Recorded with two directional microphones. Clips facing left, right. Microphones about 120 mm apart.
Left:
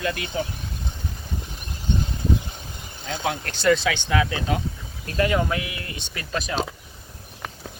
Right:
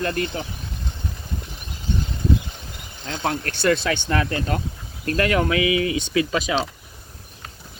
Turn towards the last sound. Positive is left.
turn(degrees=-90)